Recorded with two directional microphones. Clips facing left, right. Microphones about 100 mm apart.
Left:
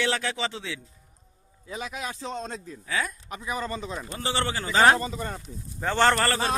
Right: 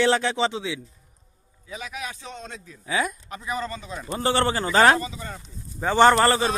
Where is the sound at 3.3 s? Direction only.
15° left (ahead or behind).